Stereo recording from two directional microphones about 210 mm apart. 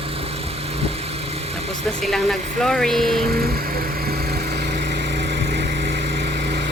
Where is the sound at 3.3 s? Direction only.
45° right (ahead or behind).